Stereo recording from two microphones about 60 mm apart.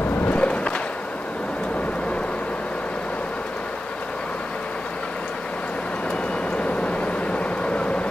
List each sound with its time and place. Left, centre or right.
0.2 s skateboard: left
6.5 s vehicle: left